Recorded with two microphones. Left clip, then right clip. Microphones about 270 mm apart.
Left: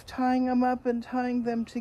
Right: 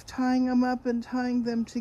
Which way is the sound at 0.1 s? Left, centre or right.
Centre.